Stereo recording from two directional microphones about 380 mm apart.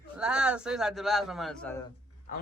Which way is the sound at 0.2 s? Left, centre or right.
Centre.